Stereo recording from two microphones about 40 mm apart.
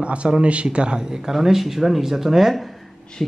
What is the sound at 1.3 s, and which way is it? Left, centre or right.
Speech, centre.